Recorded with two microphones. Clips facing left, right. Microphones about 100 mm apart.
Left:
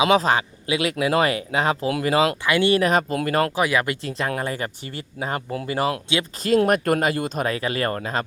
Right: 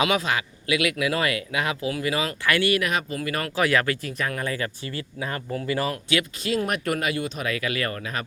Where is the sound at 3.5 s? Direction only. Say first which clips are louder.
Left 1 dB; 15° left (ahead or behind).